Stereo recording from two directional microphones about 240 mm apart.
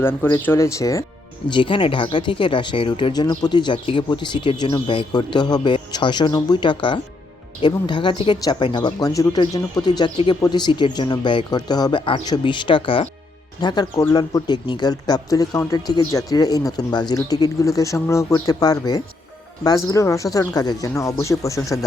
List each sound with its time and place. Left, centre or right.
0.0 s speech: centre